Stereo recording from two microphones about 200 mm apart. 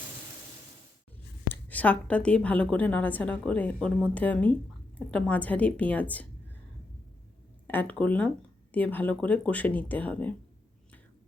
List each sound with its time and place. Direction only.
1.5 s a woman's voice: 10° left (ahead or behind)
7.7 s a woman's voice: 10° left (ahead or behind)